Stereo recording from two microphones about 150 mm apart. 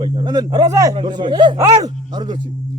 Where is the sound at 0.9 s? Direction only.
30° right (ahead or behind).